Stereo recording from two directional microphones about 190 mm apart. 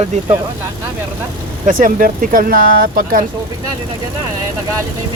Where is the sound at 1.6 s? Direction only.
45° right (ahead or behind).